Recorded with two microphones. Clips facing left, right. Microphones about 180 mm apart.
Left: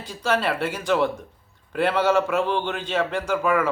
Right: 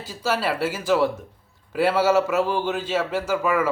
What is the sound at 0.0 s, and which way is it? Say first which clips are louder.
Speech: left 1 dB; 5° right (ahead or behind).